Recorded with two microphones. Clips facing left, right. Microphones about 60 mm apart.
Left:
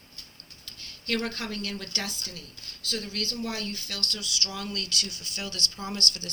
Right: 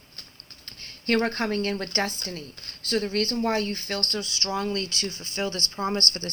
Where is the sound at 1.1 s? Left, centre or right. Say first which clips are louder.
Right 7 dB; right.